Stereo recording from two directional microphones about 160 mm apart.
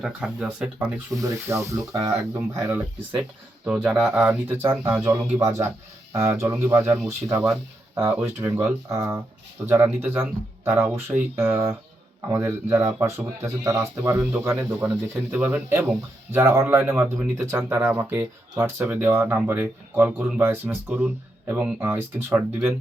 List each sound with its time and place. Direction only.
0.0 s speech: 5° right (ahead or behind)
1.1 s speech: 20° right (ahead or behind)